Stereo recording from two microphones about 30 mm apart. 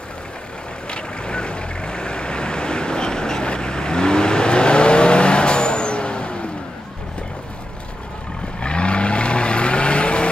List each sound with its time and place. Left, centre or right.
0.8 s vehicle: left
8.5 s vehicle: left